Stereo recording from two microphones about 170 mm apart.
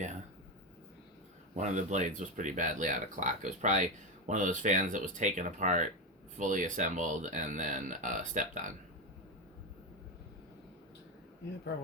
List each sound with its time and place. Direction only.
1.5 s speech: 45° right (ahead or behind)